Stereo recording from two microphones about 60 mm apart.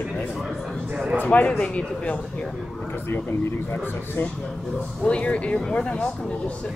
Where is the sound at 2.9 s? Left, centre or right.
Left.